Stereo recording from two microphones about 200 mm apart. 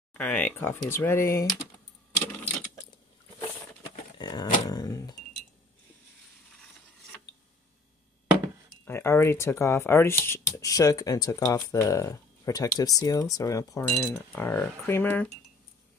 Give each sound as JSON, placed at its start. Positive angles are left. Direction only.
{"t": 0.1, "sound": "speech", "side_deg": 5}
{"t": 4.2, "sound": "a sound", "side_deg": 20}
{"t": 8.8, "sound": "speech", "side_deg": 10}